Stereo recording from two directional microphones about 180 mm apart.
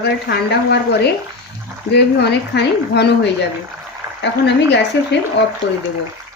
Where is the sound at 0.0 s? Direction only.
65° left (ahead or behind).